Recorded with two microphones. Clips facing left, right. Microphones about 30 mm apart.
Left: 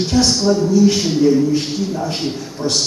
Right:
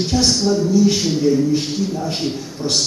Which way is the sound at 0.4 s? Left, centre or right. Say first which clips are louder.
Left 2 dB; centre.